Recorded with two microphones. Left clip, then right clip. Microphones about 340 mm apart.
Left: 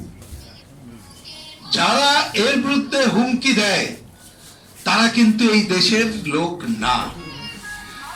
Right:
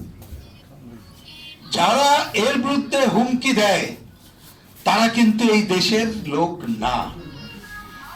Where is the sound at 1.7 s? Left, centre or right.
Centre.